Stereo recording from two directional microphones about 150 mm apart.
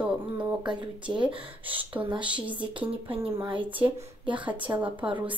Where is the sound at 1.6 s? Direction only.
10° right (ahead or behind).